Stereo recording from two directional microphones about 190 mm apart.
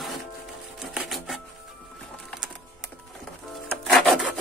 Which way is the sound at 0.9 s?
Centre (ahead or behind).